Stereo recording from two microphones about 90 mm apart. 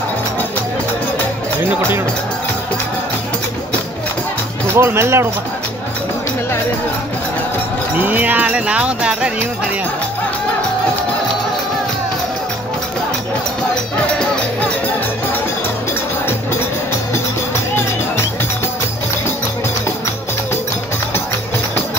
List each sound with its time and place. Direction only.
4.7 s speech: 30° right (ahead or behind)
8.0 s jingle bell: 20° right (ahead or behind)